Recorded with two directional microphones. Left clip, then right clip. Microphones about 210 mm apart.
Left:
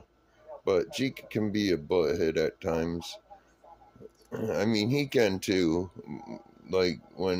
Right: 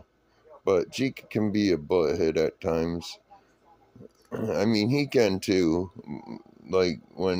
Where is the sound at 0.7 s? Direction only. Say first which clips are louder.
Right 3 dB; 25° right (ahead or behind).